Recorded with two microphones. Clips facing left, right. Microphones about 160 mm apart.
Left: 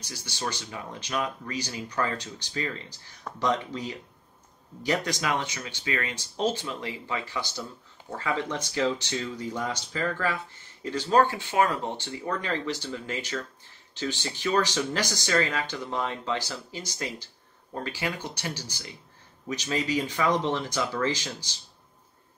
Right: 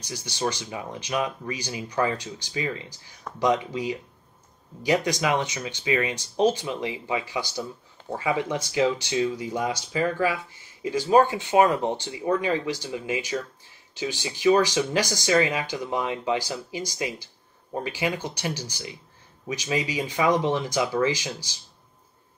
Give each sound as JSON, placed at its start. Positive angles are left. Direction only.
{"t": 0.1, "sound": "speech", "side_deg": -15}